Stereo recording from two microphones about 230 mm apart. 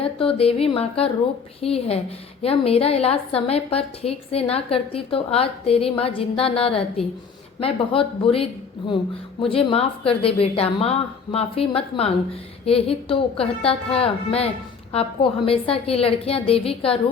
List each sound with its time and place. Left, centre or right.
0.0 s a woman's voice: left